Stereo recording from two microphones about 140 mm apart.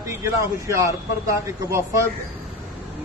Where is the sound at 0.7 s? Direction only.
25° right (ahead or behind).